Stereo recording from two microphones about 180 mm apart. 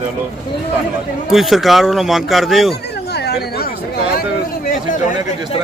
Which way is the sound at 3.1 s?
65° left (ahead or behind).